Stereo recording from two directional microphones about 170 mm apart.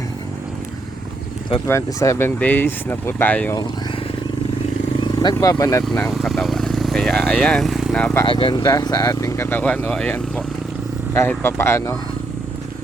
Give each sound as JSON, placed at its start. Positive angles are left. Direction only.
{"t": 1.6, "sound": "speech", "side_deg": 15}
{"t": 4.9, "sound": "speech", "side_deg": 20}
{"t": 5.9, "sound": "speech", "side_deg": 10}
{"t": 8.3, "sound": "speech", "side_deg": 30}